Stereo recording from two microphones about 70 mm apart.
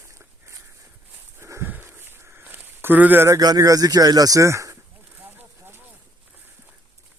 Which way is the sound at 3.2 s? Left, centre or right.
Right.